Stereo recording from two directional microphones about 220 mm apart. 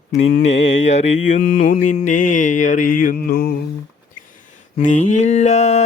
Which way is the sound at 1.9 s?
35° left (ahead or behind).